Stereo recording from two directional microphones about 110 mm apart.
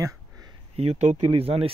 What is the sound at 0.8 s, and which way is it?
Speech, 80° right.